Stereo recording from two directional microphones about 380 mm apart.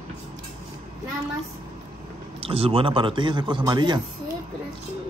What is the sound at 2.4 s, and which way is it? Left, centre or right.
A man's voice, centre.